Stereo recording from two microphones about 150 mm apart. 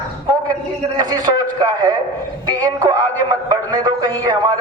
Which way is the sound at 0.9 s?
25° right (ahead or behind).